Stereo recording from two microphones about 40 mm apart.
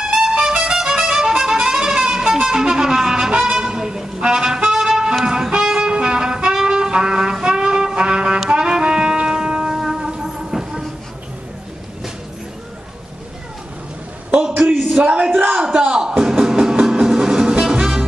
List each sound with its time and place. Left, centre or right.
0.0 s music: centre
5.5 s brass instrument: centre
9.8 s music: centre
14.7 s a sound: centre
15.0 s a sound: right
15.9 s music: centre